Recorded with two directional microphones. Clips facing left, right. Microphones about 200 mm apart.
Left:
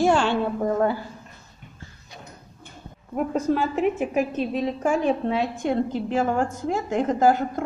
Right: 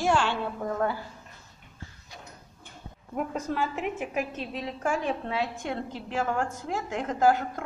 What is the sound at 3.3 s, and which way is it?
A woman's voice, 25° left (ahead or behind).